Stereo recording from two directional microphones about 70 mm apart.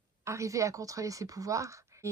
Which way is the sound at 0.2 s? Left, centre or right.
Right.